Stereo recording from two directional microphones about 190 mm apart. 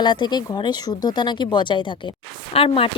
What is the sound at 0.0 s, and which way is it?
A woman's voice, 20° left (ahead or behind).